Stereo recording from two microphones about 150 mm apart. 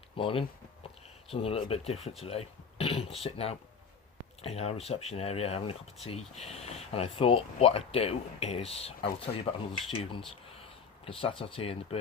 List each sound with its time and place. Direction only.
0.2 s speech: 35° left (ahead or behind)